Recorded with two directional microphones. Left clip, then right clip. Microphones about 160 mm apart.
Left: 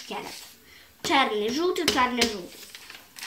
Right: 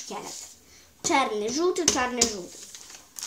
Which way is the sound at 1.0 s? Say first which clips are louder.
Left 1 dB; 10° right (ahead or behind).